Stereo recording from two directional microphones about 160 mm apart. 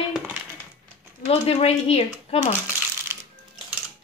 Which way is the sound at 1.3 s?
40° left (ahead or behind).